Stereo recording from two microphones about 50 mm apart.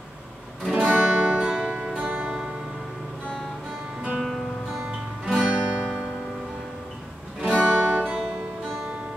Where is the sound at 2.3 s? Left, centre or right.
Centre.